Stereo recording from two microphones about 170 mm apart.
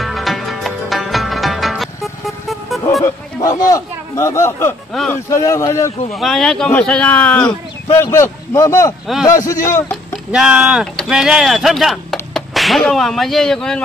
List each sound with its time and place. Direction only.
0.0 s music: centre (ahead or behind)
3.0 s a sound: 20° left (ahead or behind)
5.1 s speech: 15° left (ahead or behind)
6.1 s a man's voice: centre (ahead or behind); by 9.7 s 20° left (ahead or behind)
10.1 s speech: 5° right (ahead or behind)